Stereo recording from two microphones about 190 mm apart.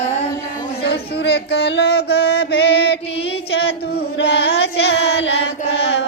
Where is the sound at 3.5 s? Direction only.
65° left (ahead or behind).